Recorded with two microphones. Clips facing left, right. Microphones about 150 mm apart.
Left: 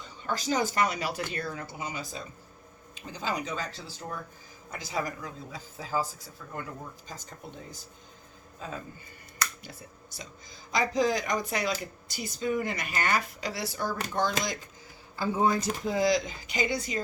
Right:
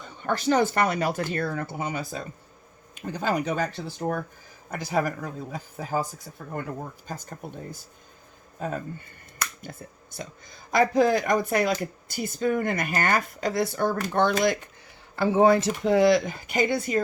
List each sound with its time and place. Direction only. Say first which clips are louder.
0.0 s a man's voice: right 7 dB; 55° right (ahead or behind)
15.1 s speech: right 7 dB; 70° right (ahead or behind); by 17.0 s 55° right (ahead or behind)